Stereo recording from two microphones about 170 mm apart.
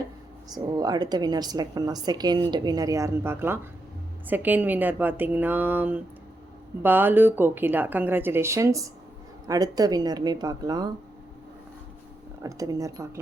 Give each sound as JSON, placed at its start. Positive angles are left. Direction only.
{"t": 0.5, "sound": "a woman's voice", "side_deg": -25}
{"t": 12.4, "sound": "a woman's voice", "side_deg": -20}